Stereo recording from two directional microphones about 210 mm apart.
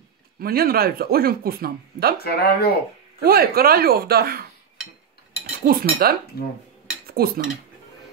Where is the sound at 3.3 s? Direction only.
45° right (ahead or behind).